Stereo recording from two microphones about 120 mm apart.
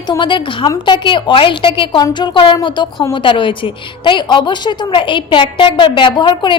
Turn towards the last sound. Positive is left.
turn(degrees=40)  # may be behind; listen again after turning